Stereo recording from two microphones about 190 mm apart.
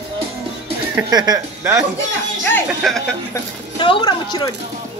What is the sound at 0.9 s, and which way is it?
Speech, 20° right (ahead or behind).